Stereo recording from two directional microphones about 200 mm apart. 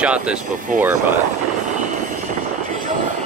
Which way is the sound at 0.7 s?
40° right (ahead or behind).